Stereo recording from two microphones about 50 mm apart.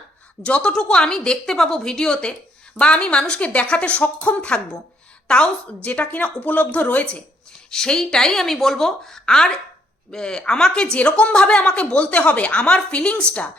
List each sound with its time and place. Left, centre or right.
0.4 s speech: left
7.7 s speech: centre